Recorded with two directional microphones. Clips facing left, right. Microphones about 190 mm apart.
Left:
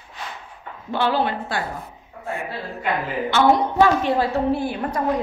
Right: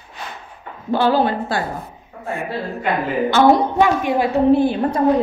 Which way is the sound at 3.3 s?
40° right (ahead or behind).